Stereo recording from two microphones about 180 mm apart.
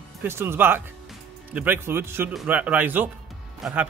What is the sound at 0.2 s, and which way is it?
Speech, 15° right (ahead or behind).